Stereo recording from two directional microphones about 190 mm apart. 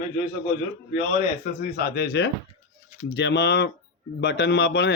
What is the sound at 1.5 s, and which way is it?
Speech, 50° left (ahead or behind).